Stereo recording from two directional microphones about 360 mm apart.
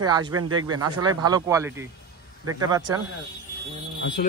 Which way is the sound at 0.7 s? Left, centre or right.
Right.